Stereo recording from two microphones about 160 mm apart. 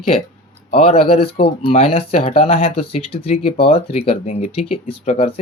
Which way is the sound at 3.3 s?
60° left (ahead or behind).